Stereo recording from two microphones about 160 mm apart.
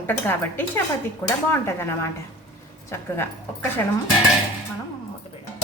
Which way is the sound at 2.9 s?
15° left (ahead or behind).